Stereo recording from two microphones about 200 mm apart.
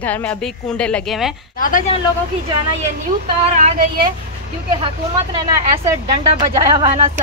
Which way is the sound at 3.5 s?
30° right (ahead or behind).